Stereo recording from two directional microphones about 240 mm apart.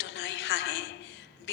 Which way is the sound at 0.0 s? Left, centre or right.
Left.